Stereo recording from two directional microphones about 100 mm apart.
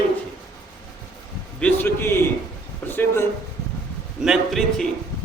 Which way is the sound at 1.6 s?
15° left (ahead or behind).